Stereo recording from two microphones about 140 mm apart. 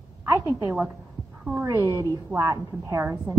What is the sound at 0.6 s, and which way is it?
A woman's voice, 20° right (ahead or behind).